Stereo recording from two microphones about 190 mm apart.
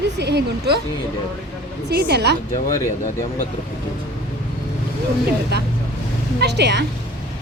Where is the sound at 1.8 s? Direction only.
60° right (ahead or behind).